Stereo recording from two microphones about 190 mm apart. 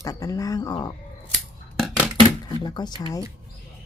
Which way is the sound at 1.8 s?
5° right (ahead or behind).